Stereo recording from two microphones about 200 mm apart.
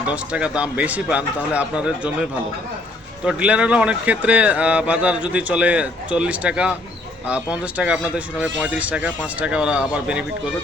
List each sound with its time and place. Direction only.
0.1 s speech: 5° right (ahead or behind)
3.2 s a man's voice: 5° right (ahead or behind)